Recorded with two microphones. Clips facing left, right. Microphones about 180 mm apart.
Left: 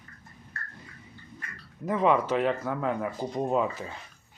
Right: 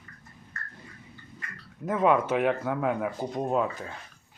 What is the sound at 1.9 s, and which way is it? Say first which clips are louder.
Speech: right 1 dB; centre (ahead or behind).